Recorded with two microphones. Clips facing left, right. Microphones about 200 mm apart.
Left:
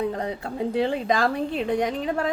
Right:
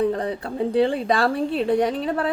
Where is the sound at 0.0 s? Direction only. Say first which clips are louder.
Right 4 dB; 35° right (ahead or behind).